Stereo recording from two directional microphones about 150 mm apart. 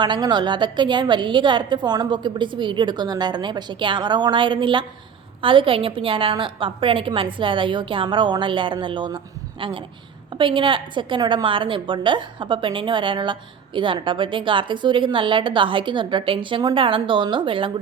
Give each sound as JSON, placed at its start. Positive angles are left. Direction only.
{"t": 0.0, "sound": "a woman's voice", "side_deg": -30}